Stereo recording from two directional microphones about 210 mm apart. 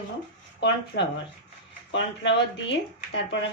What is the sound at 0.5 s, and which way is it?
A woman's voice, 55° left (ahead or behind).